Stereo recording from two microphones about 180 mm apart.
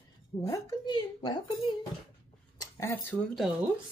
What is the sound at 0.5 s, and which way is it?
Speech, 20° left (ahead or behind).